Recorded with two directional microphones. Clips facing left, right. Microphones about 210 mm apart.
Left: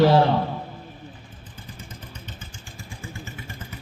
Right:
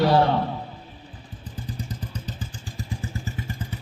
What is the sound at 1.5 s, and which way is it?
Vehicle, 35° right (ahead or behind).